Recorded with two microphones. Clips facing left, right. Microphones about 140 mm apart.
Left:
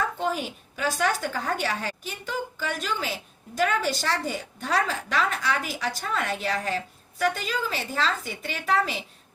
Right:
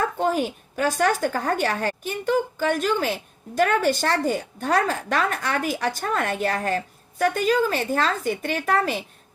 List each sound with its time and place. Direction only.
0.0 s a woman's voice: 45° right (ahead or behind)